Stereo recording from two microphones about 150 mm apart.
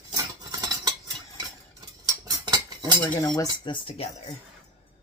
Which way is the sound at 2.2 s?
30° right (ahead or behind).